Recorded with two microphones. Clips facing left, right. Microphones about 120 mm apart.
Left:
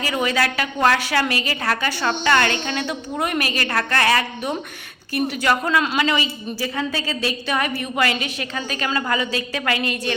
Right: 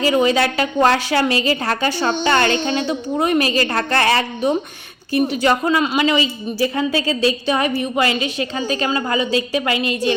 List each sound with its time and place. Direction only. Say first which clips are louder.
0.0 s a woman's voice: right 6 dB; 25° right (ahead or behind)
2.8 s a woman's voice: right 5 dB; 25° right (ahead or behind)